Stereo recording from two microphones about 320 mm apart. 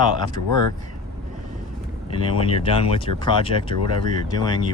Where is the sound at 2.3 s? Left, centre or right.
Centre.